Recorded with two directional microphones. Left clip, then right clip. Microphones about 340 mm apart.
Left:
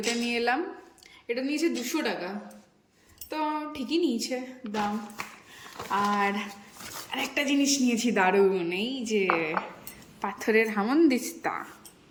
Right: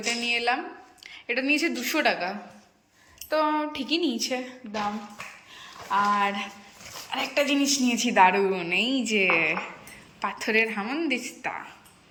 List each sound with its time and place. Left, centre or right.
0.0 s a woman's voice: centre
4.6 s speech: left
5.5 s a woman's voice: centre